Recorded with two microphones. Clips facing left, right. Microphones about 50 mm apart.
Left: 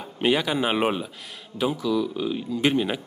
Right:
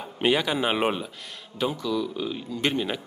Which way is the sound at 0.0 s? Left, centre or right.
Centre.